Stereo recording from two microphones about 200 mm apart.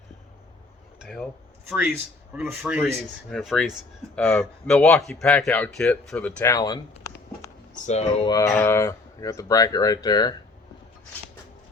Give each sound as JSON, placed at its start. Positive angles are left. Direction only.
{"t": 0.9, "sound": "dishes", "side_deg": 0}
{"t": 2.3, "sound": "speech", "side_deg": -5}
{"t": 7.7, "sound": "speech", "side_deg": 35}
{"t": 8.3, "sound": "speech", "side_deg": 15}